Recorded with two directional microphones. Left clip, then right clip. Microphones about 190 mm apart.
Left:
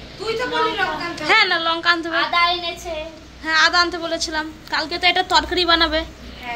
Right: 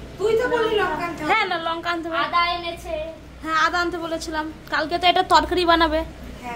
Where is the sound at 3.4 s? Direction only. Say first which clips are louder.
Left 5 dB; 10° right (ahead or behind).